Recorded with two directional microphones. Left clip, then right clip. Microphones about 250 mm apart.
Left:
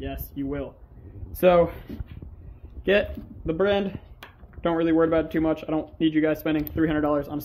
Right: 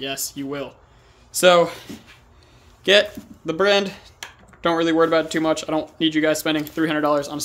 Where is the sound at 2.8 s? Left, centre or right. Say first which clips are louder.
Right 6 dB; centre.